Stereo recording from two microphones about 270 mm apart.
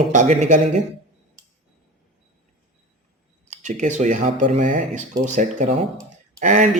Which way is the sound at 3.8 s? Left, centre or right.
Right.